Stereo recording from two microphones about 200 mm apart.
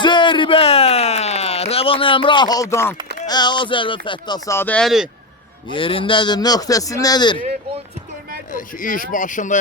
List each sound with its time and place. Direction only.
0.0 s a sound: 25° left (ahead or behind)
3.2 s speech: 20° left (ahead or behind); by 5.0 s centre (ahead or behind)
5.7 s speech: 25° left (ahead or behind)
8.5 s speech: 40° left (ahead or behind)